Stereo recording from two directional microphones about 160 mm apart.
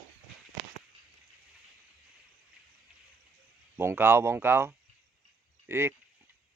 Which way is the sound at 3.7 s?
15° right (ahead or behind).